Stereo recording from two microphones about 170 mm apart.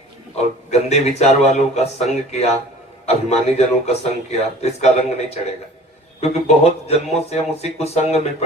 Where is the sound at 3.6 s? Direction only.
40° left (ahead or behind).